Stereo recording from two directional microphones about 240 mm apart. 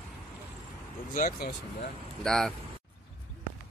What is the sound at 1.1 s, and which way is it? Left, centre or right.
Speech, left.